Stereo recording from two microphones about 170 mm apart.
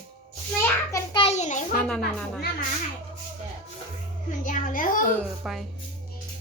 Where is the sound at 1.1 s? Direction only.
35° left (ahead or behind).